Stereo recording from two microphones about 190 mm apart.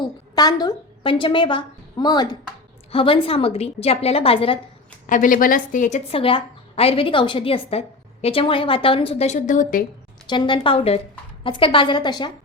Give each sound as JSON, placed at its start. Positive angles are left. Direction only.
{"t": 0.3, "sound": "a woman's voice", "side_deg": 20}
{"t": 5.0, "sound": "a woman's voice", "side_deg": 45}
{"t": 10.2, "sound": "a woman's voice", "side_deg": 25}